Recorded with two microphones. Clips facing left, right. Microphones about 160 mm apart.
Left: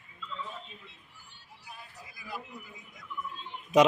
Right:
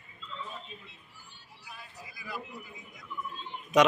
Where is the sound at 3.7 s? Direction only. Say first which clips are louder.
Left 1 dB; 30° left (ahead or behind).